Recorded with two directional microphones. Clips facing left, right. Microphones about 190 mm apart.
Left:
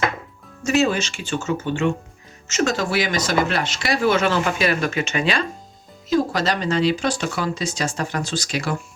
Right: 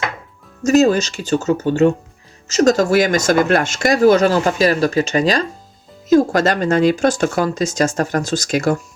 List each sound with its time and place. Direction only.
0.6 s speech: 40° right (ahead or behind)